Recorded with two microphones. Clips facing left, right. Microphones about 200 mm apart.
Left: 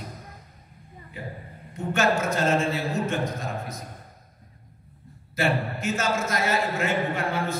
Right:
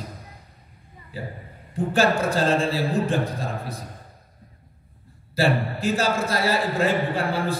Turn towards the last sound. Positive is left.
turn(degrees=-35)  # may be behind; listen again after turning